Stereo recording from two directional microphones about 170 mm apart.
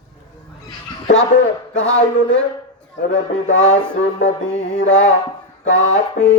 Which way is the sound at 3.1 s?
45° left (ahead or behind).